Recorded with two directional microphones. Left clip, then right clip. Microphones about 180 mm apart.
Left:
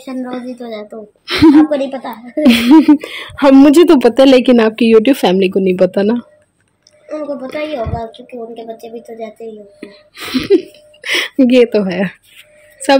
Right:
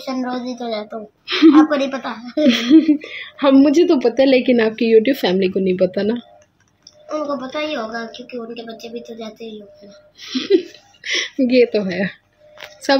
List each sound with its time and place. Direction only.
0.0 s a woman's voice: 5° right (ahead or behind)
1.2 s a woman's voice: 35° left (ahead or behind)
1.7 s a woman's voice: 5° right (ahead or behind)
2.4 s speech: 40° left (ahead or behind)
7.1 s music: centre (ahead or behind)
8.5 s a woman's voice: centre (ahead or behind)
10.1 s speech: 50° left (ahead or behind)